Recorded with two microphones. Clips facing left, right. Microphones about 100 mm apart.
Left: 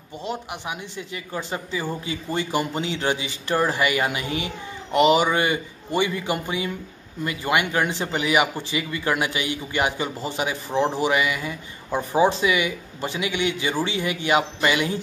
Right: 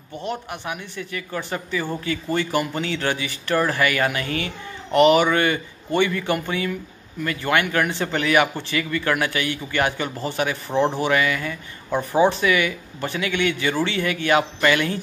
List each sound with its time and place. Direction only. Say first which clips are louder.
0.2 s a woman's voice: right 1 dB; 15° left (ahead or behind)